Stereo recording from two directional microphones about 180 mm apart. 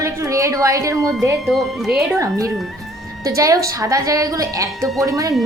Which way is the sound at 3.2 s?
20° right (ahead or behind).